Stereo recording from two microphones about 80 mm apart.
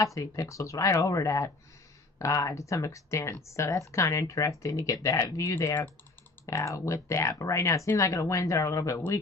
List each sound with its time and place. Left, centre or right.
0.0 s speech: left
9.0 s a man's voice: left